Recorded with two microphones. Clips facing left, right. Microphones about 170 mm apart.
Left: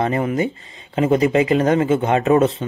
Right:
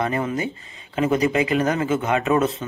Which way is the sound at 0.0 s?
30° left (ahead or behind).